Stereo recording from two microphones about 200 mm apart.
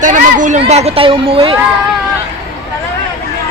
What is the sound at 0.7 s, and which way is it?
Speech, 30° right (ahead or behind).